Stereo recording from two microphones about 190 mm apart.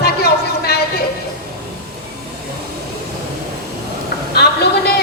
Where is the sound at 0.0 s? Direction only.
55° left (ahead or behind).